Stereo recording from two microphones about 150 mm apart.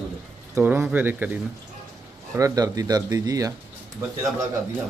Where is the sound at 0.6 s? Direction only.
10° right (ahead or behind).